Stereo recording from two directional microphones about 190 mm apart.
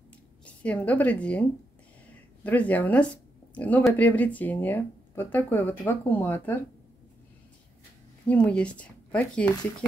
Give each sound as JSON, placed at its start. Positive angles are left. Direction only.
{"t": 0.5, "sound": "a woman's voice", "side_deg": 5}
{"t": 2.4, "sound": "speech", "side_deg": 10}
{"t": 8.3, "sound": "speech", "side_deg": 5}